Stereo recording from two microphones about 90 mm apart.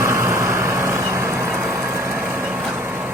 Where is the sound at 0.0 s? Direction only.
35° right (ahead or behind).